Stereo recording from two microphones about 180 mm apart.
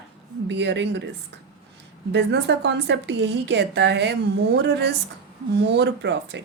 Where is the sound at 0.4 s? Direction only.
80° right.